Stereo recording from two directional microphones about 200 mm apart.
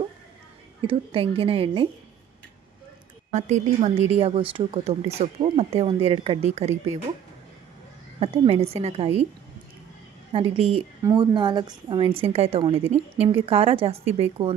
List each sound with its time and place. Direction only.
0.8 s a woman's voice: 25° right (ahead or behind)
3.3 s a woman's voice: 35° right (ahead or behind)
8.2 s a woman's voice: 30° right (ahead or behind)
10.3 s a woman's voice: 25° right (ahead or behind)